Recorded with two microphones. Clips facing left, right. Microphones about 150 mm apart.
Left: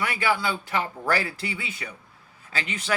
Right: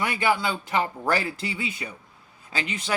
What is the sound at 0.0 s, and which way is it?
Speech, 20° right (ahead or behind).